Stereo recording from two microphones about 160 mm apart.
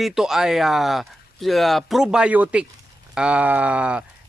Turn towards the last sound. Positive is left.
turn(degrees=-5)  # may be behind; listen again after turning